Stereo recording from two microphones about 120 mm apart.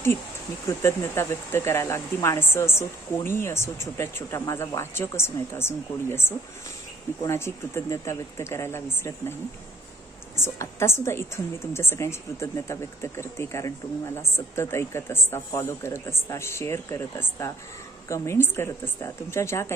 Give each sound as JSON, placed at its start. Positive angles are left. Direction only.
{"t": 0.7, "sound": "speech", "side_deg": 20}
{"t": 10.4, "sound": "speech", "side_deg": 20}